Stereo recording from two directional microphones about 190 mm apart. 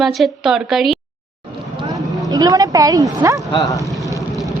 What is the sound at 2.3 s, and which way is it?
Speech, 20° right (ahead or behind).